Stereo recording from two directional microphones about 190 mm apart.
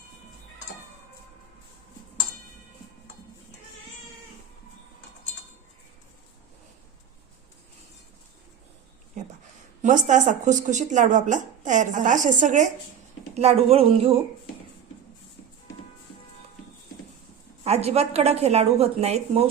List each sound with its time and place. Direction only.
9.8 s speech: 40° right (ahead or behind)
17.6 s speech: 35° right (ahead or behind)